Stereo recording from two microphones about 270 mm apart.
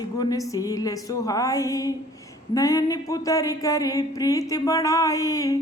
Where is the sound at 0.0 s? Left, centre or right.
Centre.